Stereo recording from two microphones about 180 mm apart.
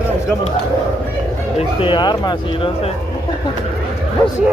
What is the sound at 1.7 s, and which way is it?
Speech, 25° left (ahead or behind).